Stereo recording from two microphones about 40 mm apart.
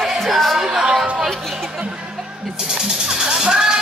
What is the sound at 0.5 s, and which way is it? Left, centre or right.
Music, centre.